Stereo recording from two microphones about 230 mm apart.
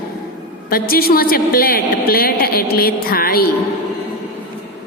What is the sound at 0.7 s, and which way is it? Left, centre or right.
A woman's voice, left.